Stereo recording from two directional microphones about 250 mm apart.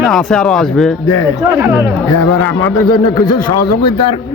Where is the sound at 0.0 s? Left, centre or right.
Centre.